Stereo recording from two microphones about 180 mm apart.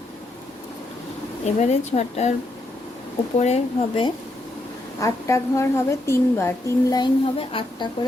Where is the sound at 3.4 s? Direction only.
40° left (ahead or behind).